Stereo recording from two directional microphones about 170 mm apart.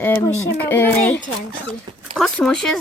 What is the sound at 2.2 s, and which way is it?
Speech, 5° left (ahead or behind).